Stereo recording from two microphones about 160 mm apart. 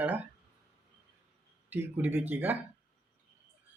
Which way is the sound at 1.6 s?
10° right (ahead or behind).